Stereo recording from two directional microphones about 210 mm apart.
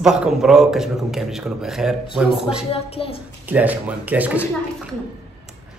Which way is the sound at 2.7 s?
25° left (ahead or behind).